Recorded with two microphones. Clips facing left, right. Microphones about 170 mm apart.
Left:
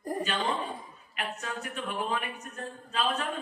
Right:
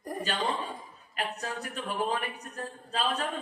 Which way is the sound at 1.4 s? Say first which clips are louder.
Even; 35° right (ahead or behind).